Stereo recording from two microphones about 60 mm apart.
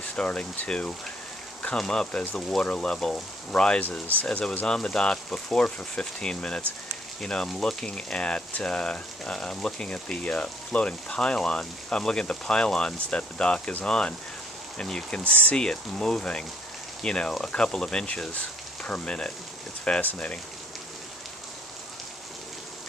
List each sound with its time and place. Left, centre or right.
0.1 s speech: centre